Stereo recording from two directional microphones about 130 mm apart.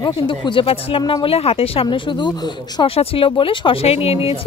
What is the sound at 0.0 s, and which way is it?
Speech, 35° left (ahead or behind).